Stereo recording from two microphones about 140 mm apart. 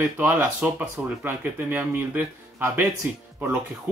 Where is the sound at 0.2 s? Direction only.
15° right (ahead or behind).